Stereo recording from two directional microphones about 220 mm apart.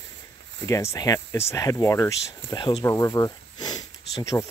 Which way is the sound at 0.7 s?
15° left (ahead or behind).